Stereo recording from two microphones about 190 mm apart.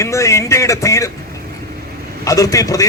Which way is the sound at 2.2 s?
15° left (ahead or behind).